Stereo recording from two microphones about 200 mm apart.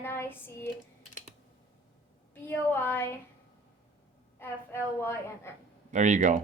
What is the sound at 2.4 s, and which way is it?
Speech, 10° left (ahead or behind).